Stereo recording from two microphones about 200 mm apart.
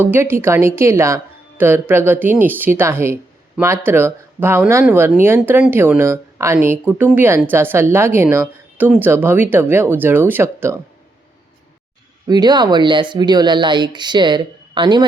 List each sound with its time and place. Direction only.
0.0 s speech: 10° right (ahead or behind)
12.3 s speech: 20° right (ahead or behind)